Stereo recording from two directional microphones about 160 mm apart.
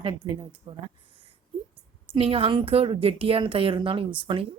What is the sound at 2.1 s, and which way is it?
A woman's voice, 35° right (ahead or behind).